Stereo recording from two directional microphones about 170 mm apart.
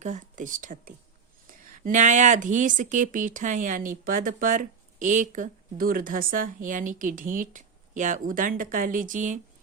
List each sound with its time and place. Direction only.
0.0 s speech: 50° right (ahead or behind)